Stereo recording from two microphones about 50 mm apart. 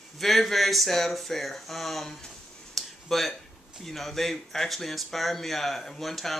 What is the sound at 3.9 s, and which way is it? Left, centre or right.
Speech, centre.